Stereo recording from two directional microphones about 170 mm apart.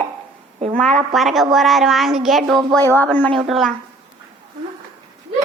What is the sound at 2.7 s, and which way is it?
Speech, 10° left (ahead or behind).